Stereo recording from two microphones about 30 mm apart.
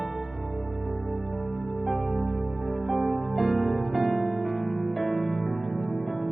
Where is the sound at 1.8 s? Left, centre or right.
Centre.